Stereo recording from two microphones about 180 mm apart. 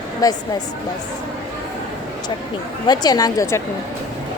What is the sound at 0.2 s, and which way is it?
Speech, 20° left (ahead or behind).